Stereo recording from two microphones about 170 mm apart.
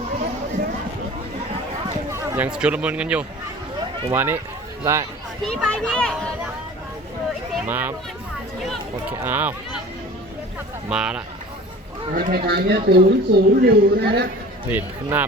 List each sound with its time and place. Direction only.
2.0 s speech: 10° right (ahead or behind)
5.5 s a child's voice: 5° left (ahead or behind)
7.7 s speech: 10° right (ahead or behind)
8.6 s a child's voice: centre (ahead or behind)
9.2 s speech: 10° right (ahead or behind)
10.8 s a child's voice: 5° right (ahead or behind)
12.1 s speech: 60° right (ahead or behind)
14.7 s speech: 10° right (ahead or behind)